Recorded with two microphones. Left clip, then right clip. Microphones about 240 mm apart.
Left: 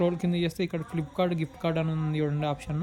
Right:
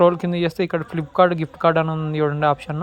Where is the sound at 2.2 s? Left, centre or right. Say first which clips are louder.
Right 16 dB; right.